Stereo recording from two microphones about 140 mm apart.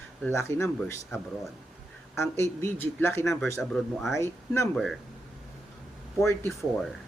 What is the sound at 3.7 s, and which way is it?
Speech, centre (ahead or behind).